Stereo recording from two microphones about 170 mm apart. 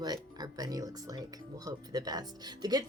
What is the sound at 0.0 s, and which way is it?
A woman's voice, 25° right (ahead or behind).